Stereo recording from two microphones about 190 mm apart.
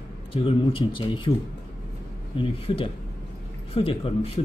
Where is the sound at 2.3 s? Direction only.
30° left (ahead or behind).